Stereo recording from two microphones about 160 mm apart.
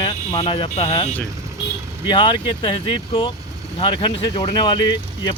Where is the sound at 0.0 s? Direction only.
30° left (ahead or behind).